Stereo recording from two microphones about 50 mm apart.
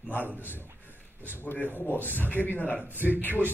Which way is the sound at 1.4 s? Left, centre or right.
Left.